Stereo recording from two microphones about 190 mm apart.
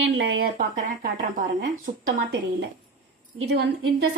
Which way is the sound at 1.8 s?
45° right (ahead or behind).